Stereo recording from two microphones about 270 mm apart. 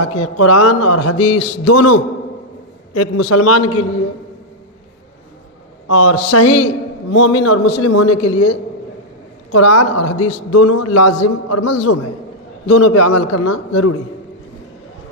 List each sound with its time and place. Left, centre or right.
0.0 s a man's voice: left
5.9 s a man's voice: left